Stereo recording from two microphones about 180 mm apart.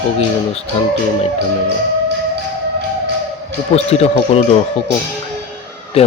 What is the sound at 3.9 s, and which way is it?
Speech, 35° left (ahead or behind).